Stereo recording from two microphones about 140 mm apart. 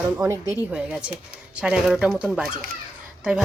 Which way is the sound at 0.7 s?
5° right (ahead or behind).